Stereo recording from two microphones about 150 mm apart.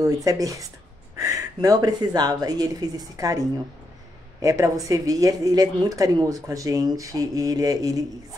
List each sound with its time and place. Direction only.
0.0 s speech: 25° right (ahead or behind)